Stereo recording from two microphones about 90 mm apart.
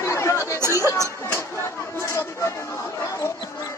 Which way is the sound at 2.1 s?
30° left (ahead or behind).